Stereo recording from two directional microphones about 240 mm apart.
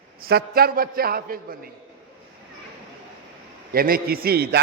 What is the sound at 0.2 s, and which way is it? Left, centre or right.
A man's voice, right.